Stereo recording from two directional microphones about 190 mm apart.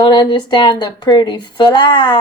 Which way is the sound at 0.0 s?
20° left (ahead or behind).